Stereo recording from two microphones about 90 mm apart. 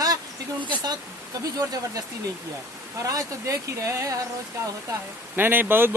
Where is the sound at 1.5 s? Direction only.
40° right (ahead or behind).